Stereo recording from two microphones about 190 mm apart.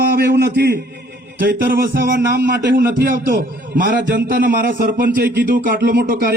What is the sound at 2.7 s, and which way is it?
A man's voice, 45° right (ahead or behind).